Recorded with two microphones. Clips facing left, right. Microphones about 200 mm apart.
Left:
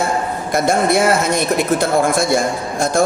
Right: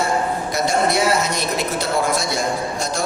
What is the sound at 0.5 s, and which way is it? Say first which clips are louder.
A man's voice: left 5 dB; 55° left (ahead or behind).